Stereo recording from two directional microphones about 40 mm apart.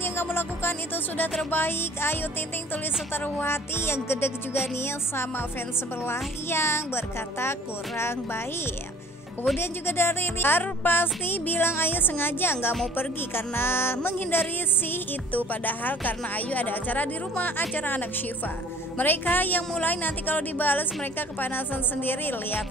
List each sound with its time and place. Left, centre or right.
0.0 s music: left
1.5 s speech: left
9.6 s a woman's voice: left
13.9 s a woman's voice: left
14.9 s a woman's voice: left